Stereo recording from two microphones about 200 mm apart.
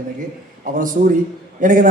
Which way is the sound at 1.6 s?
40° right (ahead or behind).